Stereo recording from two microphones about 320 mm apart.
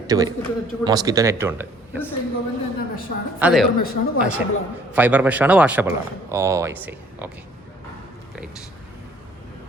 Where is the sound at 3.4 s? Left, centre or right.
Centre.